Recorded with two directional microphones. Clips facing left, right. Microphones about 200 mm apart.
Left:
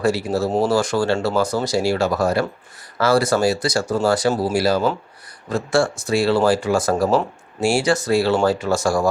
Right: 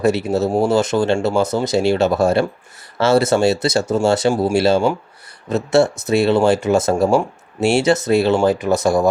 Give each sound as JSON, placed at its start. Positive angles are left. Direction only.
{"t": 0.0, "sound": "speech", "side_deg": -20}